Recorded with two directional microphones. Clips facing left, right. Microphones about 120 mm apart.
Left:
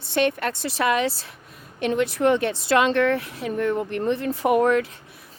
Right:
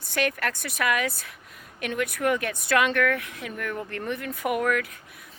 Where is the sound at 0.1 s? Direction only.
25° left (ahead or behind).